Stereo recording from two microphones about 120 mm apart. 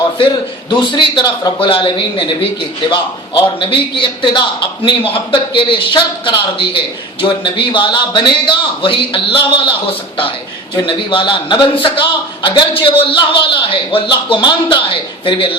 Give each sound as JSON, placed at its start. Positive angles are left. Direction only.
{"t": 0.7, "sound": "a man's voice", "side_deg": 40}
{"t": 3.6, "sound": "a man's voice", "side_deg": 45}
{"t": 10.8, "sound": "a man's voice", "side_deg": 45}